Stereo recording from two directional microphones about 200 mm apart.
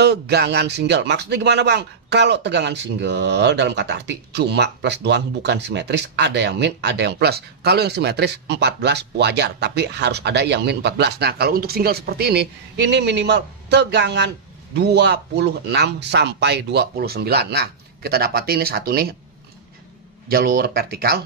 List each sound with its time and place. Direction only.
0.0 s speech: 55° right (ahead or behind)
20.2 s speech: 50° right (ahead or behind)